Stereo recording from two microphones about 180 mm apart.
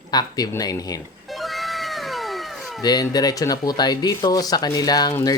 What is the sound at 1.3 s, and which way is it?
Cat, centre (ahead or behind).